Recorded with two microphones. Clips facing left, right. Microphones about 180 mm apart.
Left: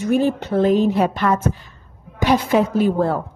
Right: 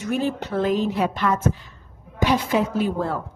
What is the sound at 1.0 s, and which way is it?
A woman's voice, 45° left (ahead or behind).